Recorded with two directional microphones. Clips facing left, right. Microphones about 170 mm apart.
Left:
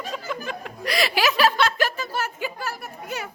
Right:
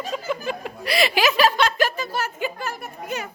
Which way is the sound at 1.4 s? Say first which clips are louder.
Even; 15° right (ahead or behind).